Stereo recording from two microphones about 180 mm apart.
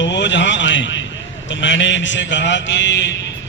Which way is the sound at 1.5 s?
85° left.